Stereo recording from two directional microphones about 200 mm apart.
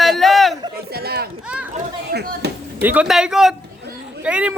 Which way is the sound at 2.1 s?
55° right (ahead or behind).